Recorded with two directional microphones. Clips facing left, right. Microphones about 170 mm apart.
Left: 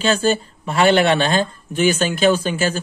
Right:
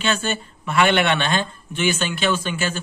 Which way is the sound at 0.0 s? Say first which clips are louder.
Left 6 dB; 35° left (ahead or behind).